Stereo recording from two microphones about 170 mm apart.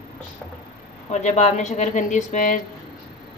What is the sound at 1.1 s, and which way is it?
Speech, 45° left (ahead or behind).